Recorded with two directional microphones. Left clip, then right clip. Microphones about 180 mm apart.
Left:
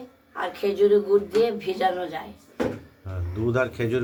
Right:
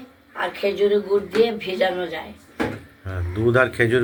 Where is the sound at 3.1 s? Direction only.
10° right (ahead or behind).